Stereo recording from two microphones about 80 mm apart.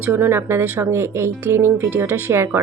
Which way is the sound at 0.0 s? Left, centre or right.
Right.